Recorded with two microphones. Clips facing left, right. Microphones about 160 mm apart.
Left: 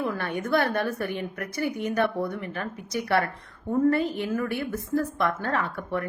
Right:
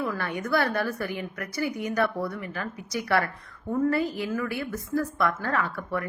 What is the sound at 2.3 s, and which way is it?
Speech, 55° left (ahead or behind).